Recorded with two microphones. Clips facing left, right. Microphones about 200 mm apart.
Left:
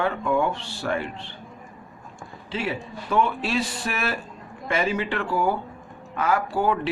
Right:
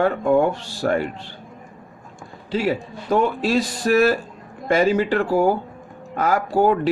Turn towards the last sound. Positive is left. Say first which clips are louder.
# right 6 dB
turn(degrees=-40)  # may be behind; listen again after turning